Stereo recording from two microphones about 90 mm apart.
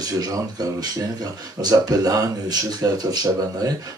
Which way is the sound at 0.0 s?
45° right (ahead or behind).